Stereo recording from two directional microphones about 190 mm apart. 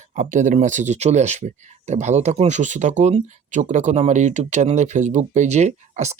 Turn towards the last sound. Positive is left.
turn(degrees=-35)  # may be behind; listen again after turning